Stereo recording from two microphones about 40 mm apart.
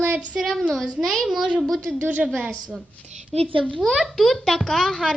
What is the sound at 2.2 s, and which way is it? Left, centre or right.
Speech, right.